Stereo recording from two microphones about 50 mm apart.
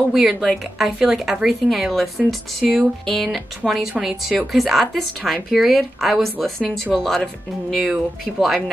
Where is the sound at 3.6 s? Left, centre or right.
Centre.